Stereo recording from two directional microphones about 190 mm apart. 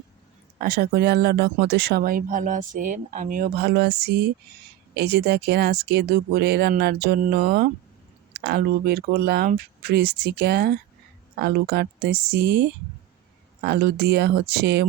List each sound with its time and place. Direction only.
0.6 s speech: 50° right (ahead or behind)